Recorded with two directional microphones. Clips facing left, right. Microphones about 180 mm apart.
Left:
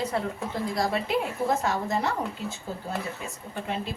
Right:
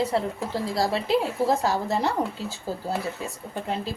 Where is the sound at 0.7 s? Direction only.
30° right (ahead or behind).